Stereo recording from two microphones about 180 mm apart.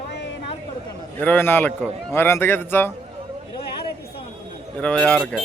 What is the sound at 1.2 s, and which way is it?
A man's voice, 10° left (ahead or behind).